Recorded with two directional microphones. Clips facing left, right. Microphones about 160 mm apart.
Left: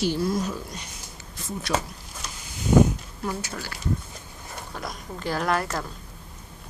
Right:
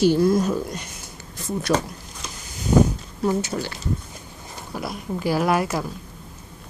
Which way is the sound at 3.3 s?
25° right (ahead or behind).